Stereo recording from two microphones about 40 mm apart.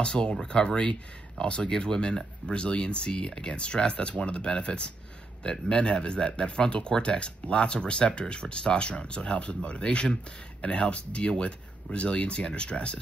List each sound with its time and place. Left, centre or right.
0.0 s speech: left